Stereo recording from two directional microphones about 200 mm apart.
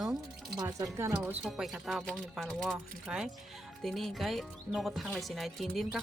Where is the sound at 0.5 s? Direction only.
20° right (ahead or behind).